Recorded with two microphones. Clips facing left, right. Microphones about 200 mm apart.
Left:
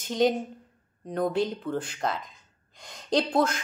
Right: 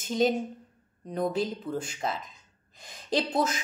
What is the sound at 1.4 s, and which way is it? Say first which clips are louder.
Speech: left 2 dB; 5° right (ahead or behind).